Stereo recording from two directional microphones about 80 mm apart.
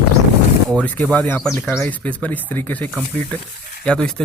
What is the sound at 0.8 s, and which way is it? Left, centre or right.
Speech, centre.